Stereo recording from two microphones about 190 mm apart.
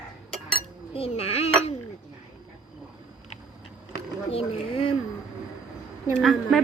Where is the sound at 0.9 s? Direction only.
30° left (ahead or behind).